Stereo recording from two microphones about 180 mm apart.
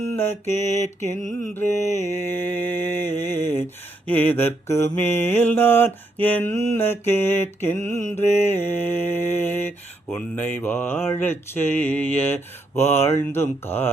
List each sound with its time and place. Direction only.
0.1 s mantra: 10° left (ahead or behind)
8.2 s mantra: 40° left (ahead or behind)
8.4 s mantra: 10° left (ahead or behind)